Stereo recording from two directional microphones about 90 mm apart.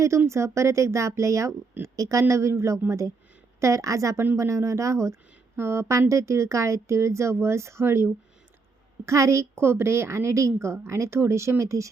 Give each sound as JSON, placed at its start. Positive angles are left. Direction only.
{"t": 0.3, "sound": "a woman's voice", "side_deg": -30}